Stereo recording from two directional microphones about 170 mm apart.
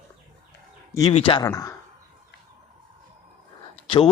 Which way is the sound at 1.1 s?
30° left (ahead or behind).